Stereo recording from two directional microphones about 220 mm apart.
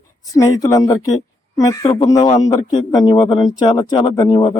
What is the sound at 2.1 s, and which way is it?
A man's voice, 15° left (ahead or behind).